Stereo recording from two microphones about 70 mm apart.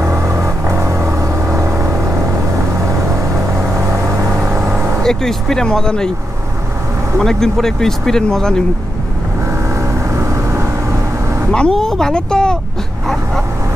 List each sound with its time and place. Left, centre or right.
0.0 s vehicle: right
5.0 s speech: centre
7.2 s speech: centre
11.5 s speech: centre